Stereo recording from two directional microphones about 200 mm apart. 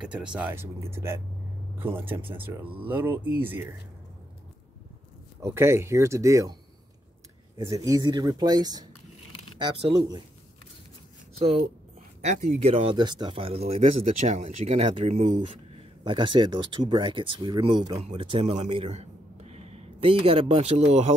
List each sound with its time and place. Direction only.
0.0 s speech: 5° right (ahead or behind)
5.4 s speech: 15° right (ahead or behind)
7.5 s speech: 15° right (ahead or behind)
11.3 s a man's voice: 30° right (ahead or behind)